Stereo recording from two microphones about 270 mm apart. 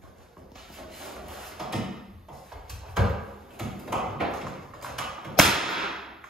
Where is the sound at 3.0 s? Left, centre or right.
Centre.